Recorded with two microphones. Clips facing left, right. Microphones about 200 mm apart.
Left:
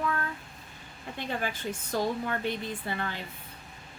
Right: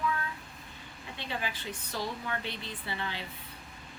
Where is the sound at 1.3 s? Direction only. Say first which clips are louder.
Left 4 dB; 45° left (ahead or behind).